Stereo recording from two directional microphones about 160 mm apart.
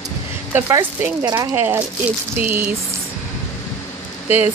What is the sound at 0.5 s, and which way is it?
Speech, 10° right (ahead or behind).